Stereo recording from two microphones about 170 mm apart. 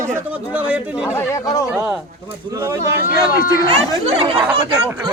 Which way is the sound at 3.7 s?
35° right (ahead or behind).